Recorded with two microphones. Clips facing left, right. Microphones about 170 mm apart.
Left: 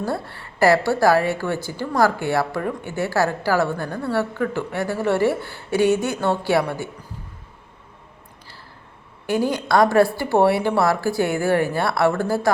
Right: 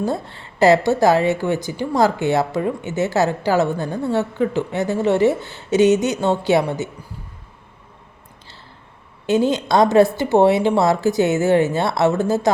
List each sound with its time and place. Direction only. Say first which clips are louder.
0.0 s a woman's voice: right 3 dB; 20° right (ahead or behind)
9.2 s a woman's voice: right 4 dB; 20° right (ahead or behind)